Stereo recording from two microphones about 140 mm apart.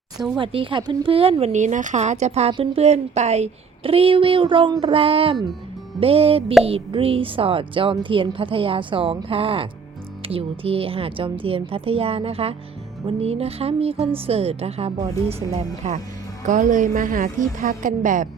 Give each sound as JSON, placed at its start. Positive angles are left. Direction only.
{"t": 0.3, "sound": "a woman's voice", "side_deg": -35}
{"t": 1.5, "sound": "a woman's voice", "side_deg": -60}
{"t": 15.8, "sound": "a woman's voice", "side_deg": -55}